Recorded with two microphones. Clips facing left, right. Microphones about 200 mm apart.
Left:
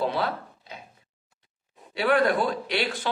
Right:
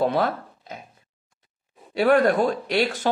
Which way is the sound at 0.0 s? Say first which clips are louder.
Right 5 dB; 50° right (ahead or behind).